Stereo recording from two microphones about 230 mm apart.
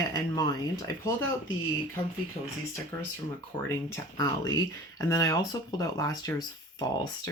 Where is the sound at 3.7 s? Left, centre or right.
Centre.